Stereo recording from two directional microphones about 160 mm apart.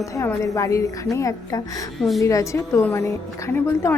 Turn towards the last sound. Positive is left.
turn(degrees=15)  # may be behind; listen again after turning